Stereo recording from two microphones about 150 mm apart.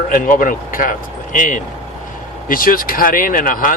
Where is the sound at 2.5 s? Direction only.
70° left (ahead or behind).